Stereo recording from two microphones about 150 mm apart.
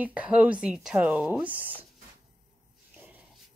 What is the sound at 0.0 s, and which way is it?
A woman's voice, 10° right (ahead or behind).